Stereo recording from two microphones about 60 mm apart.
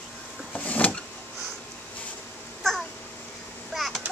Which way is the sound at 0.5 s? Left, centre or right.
Left.